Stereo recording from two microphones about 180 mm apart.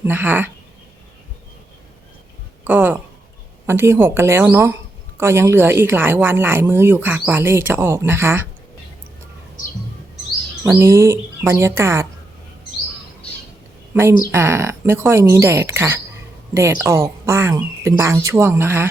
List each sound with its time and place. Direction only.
0.0 s speech: 10° right (ahead or behind)
2.6 s speech: 10° right (ahead or behind)
10.6 s speech: 15° right (ahead or behind)
13.9 s speech: 15° right (ahead or behind)